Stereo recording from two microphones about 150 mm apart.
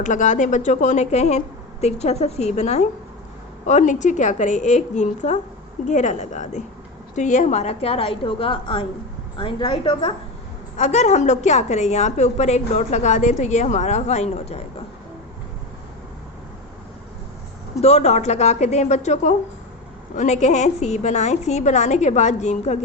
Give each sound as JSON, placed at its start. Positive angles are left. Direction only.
{"t": 0.0, "sound": "a woman's voice", "side_deg": 55}
{"t": 10.8, "sound": "a woman's voice", "side_deg": 50}
{"t": 17.7, "sound": "a woman's voice", "side_deg": 45}